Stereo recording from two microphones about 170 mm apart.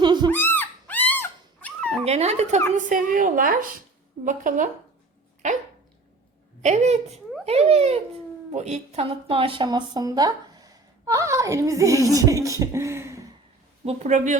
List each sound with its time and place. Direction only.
0.0 s owl: 25° right (ahead or behind)
0.3 s dog: 10° left (ahead or behind)
2.0 s a child's voice: 40° right (ahead or behind)
2.7 s a woman's voice: 50° right (ahead or behind); by 13.2 s 15° right (ahead or behind)
13.8 s a woman's voice: 45° right (ahead or behind)